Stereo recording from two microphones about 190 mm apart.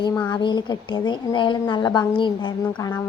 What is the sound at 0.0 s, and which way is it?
A woman's voice, 20° left (ahead or behind).